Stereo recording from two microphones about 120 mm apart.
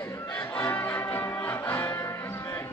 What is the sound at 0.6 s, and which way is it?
Music, 15° left (ahead or behind).